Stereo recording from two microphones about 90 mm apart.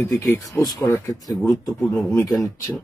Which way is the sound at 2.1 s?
40° left (ahead or behind).